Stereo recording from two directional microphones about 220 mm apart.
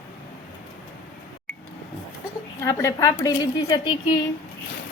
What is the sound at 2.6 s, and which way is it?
Speech, 15° left (ahead or behind).